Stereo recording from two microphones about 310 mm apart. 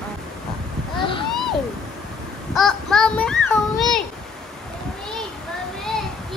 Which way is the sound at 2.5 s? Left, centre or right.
Centre.